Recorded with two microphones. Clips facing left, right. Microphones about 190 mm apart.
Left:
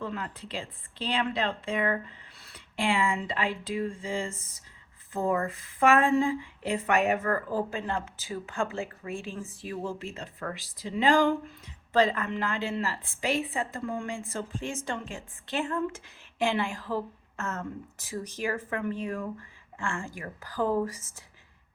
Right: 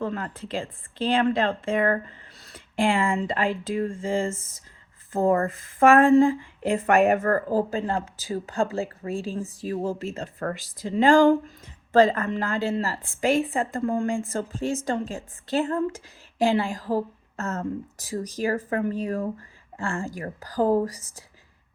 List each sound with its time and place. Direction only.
0.0 s a woman's voice: 45° right (ahead or behind)